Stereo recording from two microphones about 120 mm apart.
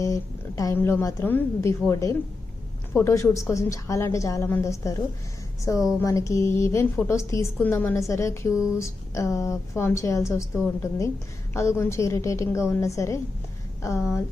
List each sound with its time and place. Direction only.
0.0 s a woman's voice: 30° left (ahead or behind)
0.8 s a woman's voice: 15° left (ahead or behind)